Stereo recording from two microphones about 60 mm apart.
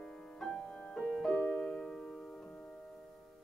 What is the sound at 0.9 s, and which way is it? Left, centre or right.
Music, centre.